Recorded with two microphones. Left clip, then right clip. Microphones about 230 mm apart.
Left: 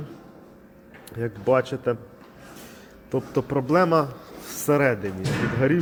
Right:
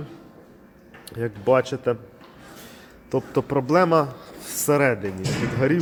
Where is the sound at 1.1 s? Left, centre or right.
Centre.